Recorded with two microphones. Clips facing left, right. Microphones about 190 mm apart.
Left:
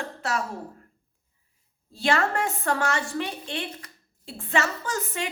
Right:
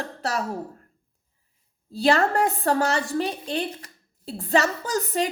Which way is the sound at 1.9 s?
35° right (ahead or behind).